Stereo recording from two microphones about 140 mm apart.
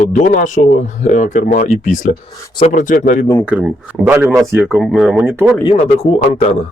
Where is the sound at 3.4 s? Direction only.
10° right (ahead or behind).